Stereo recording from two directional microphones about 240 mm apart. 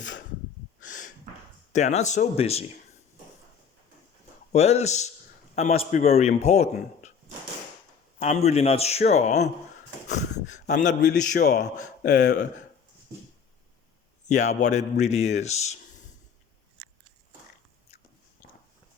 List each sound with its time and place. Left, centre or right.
0.8 s snort: left
1.7 s a man's voice: left
4.5 s a man's voice: left
8.2 s a man's voice: left
11.0 s speech: left
14.3 s a man's voice: left